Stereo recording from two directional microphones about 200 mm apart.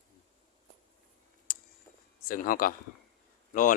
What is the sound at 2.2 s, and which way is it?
Speech, 45° left (ahead or behind).